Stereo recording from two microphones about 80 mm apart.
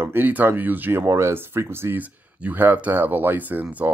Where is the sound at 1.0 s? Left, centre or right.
Right.